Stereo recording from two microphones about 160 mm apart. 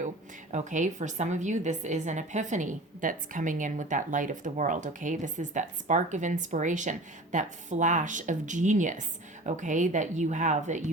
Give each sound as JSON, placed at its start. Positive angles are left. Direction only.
{"t": 0.5, "sound": "a woman's voice", "side_deg": -50}